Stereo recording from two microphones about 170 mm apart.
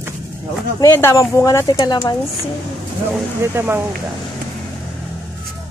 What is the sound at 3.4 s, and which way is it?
Speech, 15° right (ahead or behind).